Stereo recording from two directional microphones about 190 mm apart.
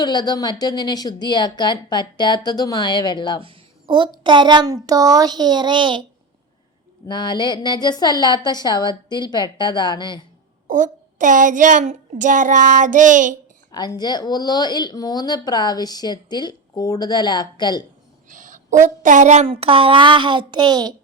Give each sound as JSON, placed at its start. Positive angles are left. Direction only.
{"t": 0.0, "sound": "speech", "side_deg": 20}
{"t": 3.4, "sound": "a sound", "side_deg": -25}
{"t": 4.2, "sound": "a woman's voice", "side_deg": -25}
{"t": 7.1, "sound": "speech", "side_deg": 25}
{"t": 10.7, "sound": "speech", "side_deg": -40}
{"t": 13.7, "sound": "speech", "side_deg": 20}
{"t": 18.3, "sound": "a woman's voice", "side_deg": -40}